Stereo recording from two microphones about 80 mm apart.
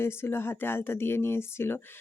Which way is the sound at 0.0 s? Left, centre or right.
Left.